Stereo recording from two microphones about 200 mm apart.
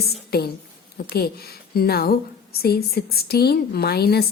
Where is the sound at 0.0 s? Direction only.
50° left (ahead or behind).